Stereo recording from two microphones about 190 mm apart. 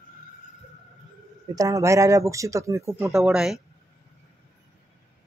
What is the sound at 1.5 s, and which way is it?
Speech, 15° right (ahead or behind).